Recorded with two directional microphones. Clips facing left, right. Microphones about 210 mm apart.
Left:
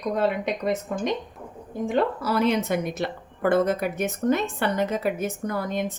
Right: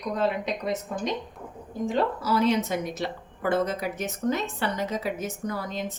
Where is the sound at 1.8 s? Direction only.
60° left (ahead or behind).